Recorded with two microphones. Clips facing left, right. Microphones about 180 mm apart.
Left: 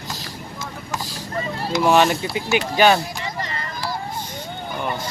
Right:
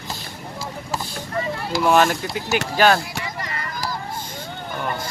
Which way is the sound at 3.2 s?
30° left (ahead or behind).